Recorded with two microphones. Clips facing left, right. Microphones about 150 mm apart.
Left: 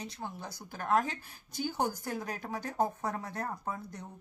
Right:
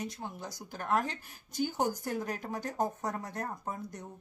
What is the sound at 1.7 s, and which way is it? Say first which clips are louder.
Speech: even; 20° right (ahead or behind).